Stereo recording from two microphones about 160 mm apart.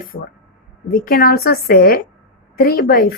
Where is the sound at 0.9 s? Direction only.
65° left (ahead or behind).